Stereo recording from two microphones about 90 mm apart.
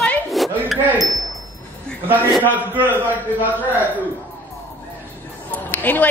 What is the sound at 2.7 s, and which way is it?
A man's voice, 20° right (ahead or behind).